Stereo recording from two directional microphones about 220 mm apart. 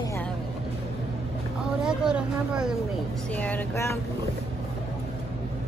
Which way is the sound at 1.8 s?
5° right (ahead or behind).